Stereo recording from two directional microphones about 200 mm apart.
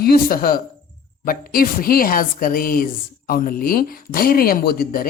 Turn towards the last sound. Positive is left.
turn(degrees=45)  # may be behind; listen again after turning